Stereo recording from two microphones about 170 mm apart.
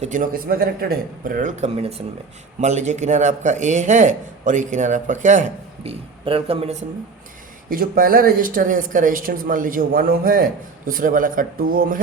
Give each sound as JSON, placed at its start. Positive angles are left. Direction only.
{"t": 0.0, "sound": "a man's voice", "side_deg": -50}
{"t": 7.7, "sound": "speech", "side_deg": -55}